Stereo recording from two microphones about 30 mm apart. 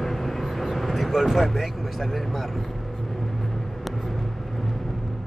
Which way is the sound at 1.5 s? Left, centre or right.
Centre.